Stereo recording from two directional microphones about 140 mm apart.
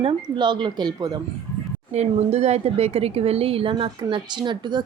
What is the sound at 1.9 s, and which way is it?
Speech, 50° right (ahead or behind).